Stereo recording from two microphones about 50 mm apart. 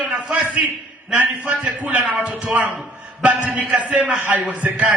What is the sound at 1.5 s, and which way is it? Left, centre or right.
A man's voice, right.